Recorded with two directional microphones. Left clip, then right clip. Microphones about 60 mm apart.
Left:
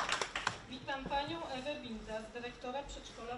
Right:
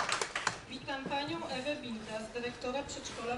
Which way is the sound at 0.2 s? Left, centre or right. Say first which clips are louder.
Right 3 dB; centre.